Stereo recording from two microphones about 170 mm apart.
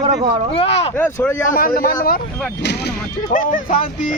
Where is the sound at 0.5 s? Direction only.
35° left (ahead or behind).